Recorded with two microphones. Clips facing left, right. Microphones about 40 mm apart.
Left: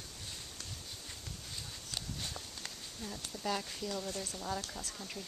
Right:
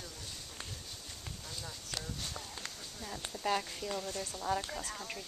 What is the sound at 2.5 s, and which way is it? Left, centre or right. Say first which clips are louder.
Speech: right 2 dB; right.